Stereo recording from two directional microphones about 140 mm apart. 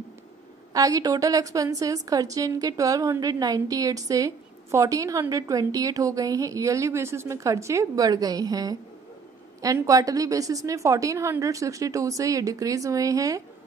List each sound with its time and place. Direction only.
0.7 s a woman's voice: 25° right (ahead or behind)